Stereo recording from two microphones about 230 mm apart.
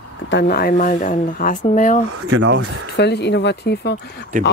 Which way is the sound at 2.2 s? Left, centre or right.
Right.